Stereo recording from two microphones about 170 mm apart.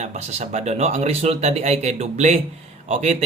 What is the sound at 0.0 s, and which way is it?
Speech, 40° right (ahead or behind).